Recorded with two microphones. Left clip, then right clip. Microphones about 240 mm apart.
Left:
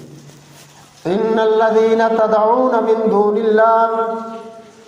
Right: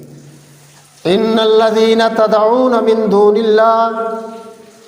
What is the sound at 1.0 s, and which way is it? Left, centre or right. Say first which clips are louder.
A man's voice: right 3 dB; right.